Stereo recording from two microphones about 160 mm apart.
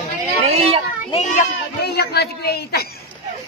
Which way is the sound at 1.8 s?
90° left.